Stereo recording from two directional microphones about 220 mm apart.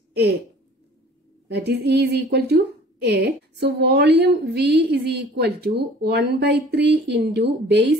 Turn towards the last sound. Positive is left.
turn(degrees=-50)  # may be behind; listen again after turning